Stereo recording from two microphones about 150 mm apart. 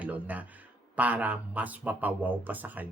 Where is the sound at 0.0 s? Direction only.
10° right (ahead or behind).